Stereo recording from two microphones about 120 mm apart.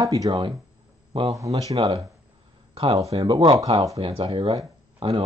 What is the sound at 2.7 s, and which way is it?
Speech, 45° right (ahead or behind).